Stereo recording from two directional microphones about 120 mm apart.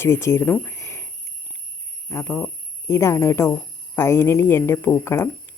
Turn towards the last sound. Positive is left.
turn(degrees=20)  # may be behind; listen again after turning